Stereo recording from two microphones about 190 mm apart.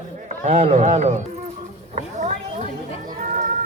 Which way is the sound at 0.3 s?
35° right (ahead or behind).